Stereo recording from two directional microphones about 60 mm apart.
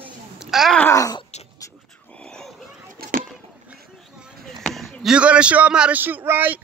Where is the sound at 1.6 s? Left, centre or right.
Left.